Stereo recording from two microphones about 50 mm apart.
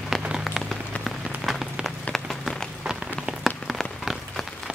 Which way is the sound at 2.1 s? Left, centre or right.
Centre.